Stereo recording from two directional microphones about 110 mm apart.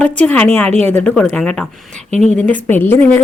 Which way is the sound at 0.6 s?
75° right (ahead or behind).